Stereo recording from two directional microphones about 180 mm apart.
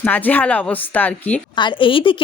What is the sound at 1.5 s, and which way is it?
Speech, 25° left (ahead or behind).